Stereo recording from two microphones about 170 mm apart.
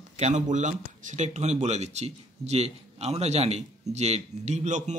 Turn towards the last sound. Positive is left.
turn(degrees=-45)  # may be behind; listen again after turning